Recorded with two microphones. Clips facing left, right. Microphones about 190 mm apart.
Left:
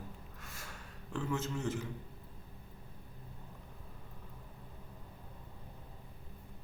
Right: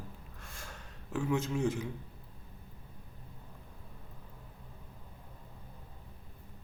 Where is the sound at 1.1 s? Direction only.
15° right (ahead or behind).